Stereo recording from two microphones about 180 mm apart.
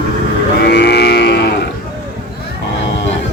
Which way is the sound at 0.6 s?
65° left (ahead or behind).